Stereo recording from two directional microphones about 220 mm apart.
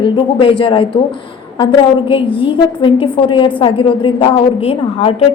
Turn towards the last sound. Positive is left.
turn(degrees=25)  # may be behind; listen again after turning